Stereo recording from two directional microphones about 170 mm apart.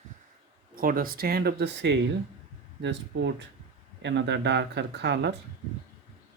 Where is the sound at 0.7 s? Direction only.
55° right (ahead or behind); by 1.9 s 75° right (ahead or behind).